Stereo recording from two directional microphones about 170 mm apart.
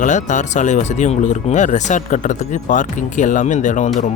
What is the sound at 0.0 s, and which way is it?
Speech, 45° left (ahead or behind).